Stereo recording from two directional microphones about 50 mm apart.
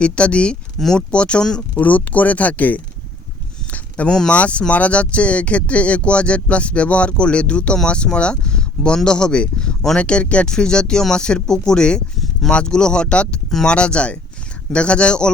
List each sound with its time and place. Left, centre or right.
0.0 s speech: left
1.8 s speech: left
3.7 s a sound: left
4.1 s speech: centre
4.4 s speech: left